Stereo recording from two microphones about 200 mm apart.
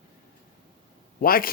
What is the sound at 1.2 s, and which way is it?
Speech, 45° left (ahead or behind).